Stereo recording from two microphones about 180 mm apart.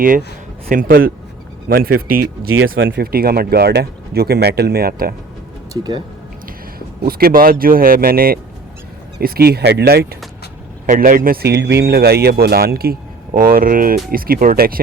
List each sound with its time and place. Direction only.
0.7 s speech: 50° right (ahead or behind)
2.6 s a man's voice: 90° right; by 5.1 s 55° right (ahead or behind)
5.7 s speech: 25° right (ahead or behind)
6.7 s a man's voice: 55° right (ahead or behind)
10.8 s a man's voice: 50° right (ahead or behind)